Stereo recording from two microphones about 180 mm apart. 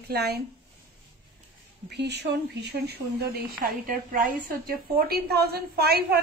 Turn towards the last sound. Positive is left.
turn(degrees=-60)  # may be behind; listen again after turning